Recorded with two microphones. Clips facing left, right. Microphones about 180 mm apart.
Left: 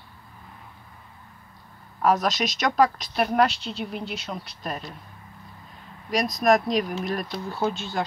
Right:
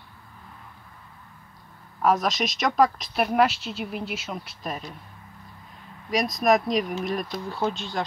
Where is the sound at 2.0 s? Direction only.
Centre (ahead or behind).